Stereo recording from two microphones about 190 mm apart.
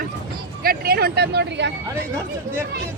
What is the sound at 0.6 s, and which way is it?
Speech, 50° right (ahead or behind).